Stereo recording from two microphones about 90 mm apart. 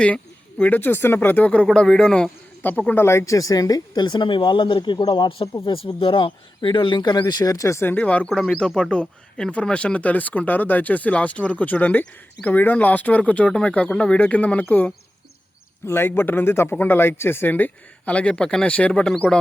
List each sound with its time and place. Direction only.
0.6 s speech: 20° left (ahead or behind)
1.6 s speech: 5° left (ahead or behind)
2.6 s a woman's voice: 20° left (ahead or behind); by 5.3 s 55° left (ahead or behind)
5.6 s speech: 90° left; by 7.9 s 30° left (ahead or behind)
7.9 s speech: 15° left (ahead or behind)
8.3 s speech: 5° left (ahead or behind)